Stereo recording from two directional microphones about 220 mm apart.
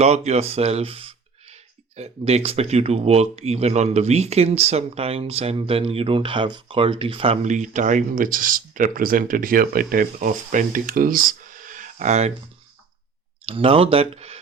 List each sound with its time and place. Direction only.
0.0 s speech: 30° right (ahead or behind)
13.5 s speech: 25° right (ahead or behind)